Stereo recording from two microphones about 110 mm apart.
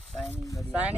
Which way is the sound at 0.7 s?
15° right (ahead or behind).